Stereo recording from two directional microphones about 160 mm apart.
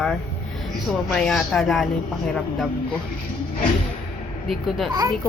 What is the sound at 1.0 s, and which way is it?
A woman's voice, 5° left (ahead or behind).